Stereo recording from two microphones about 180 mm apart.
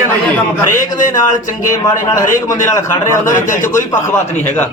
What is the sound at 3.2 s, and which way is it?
Speech, 45° left (ahead or behind).